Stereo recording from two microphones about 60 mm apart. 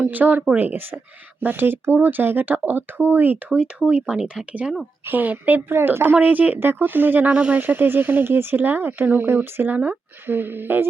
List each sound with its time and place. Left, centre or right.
0.0 s speech: right
3.5 s speech: centre
5.0 s speech: right
7.3 s speech: centre
7.6 s speech: right
9.7 s speech: right
10.2 s speech: right